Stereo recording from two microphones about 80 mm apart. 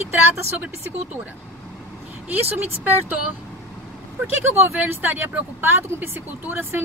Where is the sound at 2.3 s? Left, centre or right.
Right.